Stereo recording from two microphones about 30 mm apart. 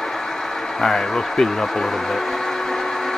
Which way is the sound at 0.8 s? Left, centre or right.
Centre.